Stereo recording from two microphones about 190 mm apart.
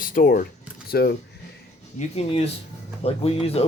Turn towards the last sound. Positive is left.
turn(degrees=30)  # may be behind; listen again after turning